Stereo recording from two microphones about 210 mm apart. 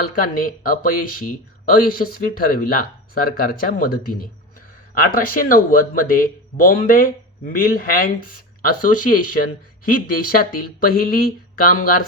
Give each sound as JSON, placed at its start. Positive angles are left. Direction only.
{"t": 0.0, "sound": "speech", "side_deg": 45}